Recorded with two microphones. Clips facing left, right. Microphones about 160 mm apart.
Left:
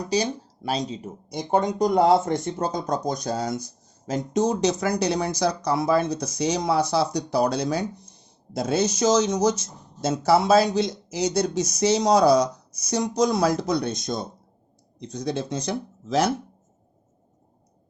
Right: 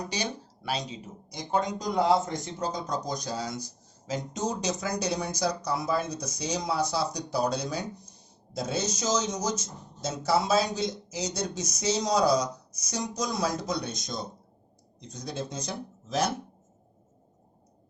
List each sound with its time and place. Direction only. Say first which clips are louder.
0.1 s speech: left 9 dB; 40° left (ahead or behind)
1.3 s speech: left 6 dB; 60° left (ahead or behind)